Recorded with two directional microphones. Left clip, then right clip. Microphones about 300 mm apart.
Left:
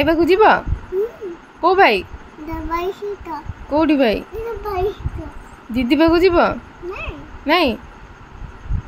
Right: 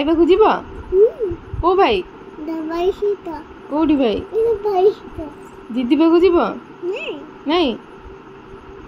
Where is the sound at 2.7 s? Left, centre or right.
Centre.